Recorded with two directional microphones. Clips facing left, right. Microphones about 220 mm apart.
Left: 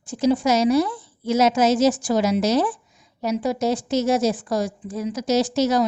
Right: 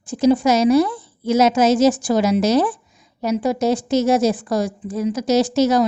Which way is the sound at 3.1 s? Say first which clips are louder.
Right 3 dB; 80° right.